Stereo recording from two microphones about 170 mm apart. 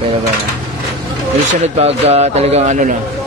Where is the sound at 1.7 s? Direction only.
40° right (ahead or behind).